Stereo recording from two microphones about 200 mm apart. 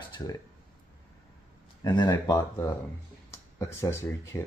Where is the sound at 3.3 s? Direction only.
15° left (ahead or behind).